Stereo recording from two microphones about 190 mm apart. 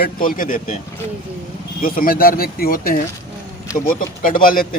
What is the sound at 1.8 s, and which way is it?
Speech, 50° left (ahead or behind).